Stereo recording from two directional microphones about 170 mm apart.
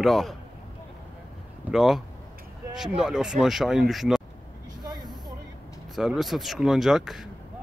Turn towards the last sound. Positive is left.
turn(degrees=0)  # may be behind; listen again after turning